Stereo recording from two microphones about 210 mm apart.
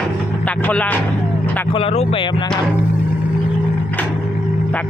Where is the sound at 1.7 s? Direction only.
25° left (ahead or behind).